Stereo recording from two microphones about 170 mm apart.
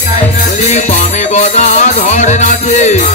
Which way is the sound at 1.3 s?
45° left (ahead or behind).